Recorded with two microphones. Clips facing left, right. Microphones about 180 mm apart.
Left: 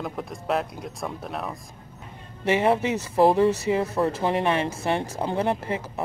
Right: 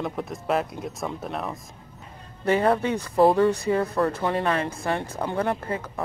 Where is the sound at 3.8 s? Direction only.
25° left (ahead or behind).